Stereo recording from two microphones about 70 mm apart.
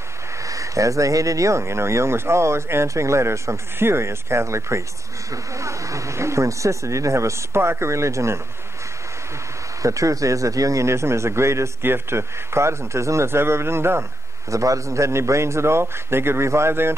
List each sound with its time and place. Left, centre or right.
0.4 s speech: right
9.8 s a man's voice: right
14.5 s a man's voice: right